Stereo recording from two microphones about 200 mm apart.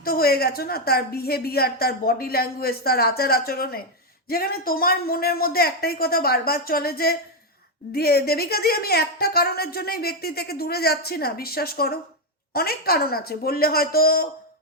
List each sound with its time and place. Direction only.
0.0 s a woman's voice: 50° left (ahead or behind)